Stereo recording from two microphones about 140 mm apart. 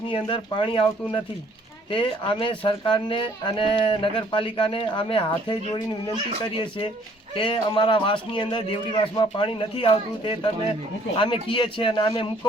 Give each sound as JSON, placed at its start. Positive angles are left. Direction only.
{"t": 0.1, "sound": "speech", "side_deg": 35}